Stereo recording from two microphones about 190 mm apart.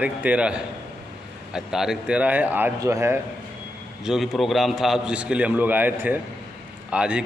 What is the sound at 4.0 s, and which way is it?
A man's voice, centre (ahead or behind).